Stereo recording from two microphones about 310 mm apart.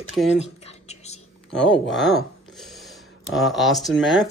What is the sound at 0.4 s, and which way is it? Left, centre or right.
Whispering, left.